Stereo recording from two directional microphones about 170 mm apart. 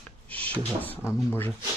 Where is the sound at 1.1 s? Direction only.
15° left (ahead or behind).